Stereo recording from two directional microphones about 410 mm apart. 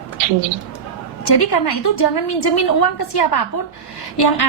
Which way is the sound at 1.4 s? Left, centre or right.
Left.